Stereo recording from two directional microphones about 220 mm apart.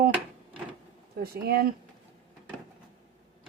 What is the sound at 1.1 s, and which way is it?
Speech, 45° right (ahead or behind).